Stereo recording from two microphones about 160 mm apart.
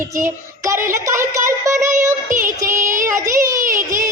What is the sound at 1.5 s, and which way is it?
Music, 20° right (ahead or behind).